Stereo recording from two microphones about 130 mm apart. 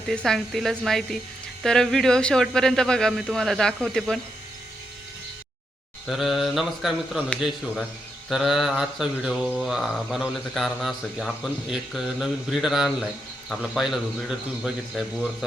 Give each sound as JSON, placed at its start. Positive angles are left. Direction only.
{"t": 0.1, "sound": "mantra", "side_deg": 5}
{"t": 6.1, "sound": "mantra", "side_deg": 0}
{"t": 8.3, "sound": "mantra", "side_deg": 0}